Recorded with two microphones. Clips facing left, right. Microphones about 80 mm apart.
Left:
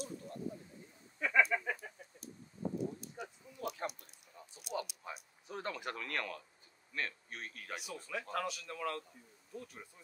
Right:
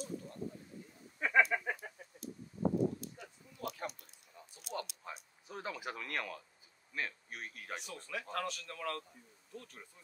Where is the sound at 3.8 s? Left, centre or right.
Left.